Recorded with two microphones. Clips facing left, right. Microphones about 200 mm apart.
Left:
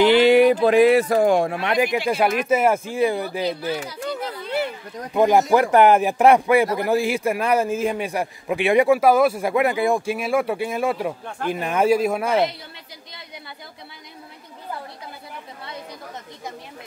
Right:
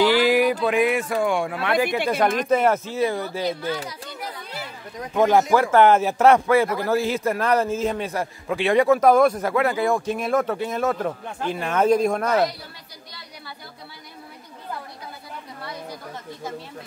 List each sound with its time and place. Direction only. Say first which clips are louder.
0.0 s a sound: left 4 dB; 25° left (ahead or behind)
1.6 s a man's voice: left 1 dB; 20° left (ahead or behind)
5.1 s a man's voice: left 1 dB; 15° left (ahead or behind)